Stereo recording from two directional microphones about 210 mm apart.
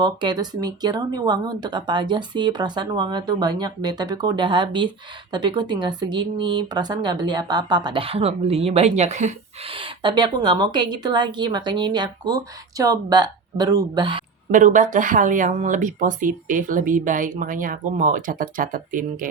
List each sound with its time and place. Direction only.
0.0 s speech: 20° right (ahead or behind)
14.5 s speech: 40° right (ahead or behind)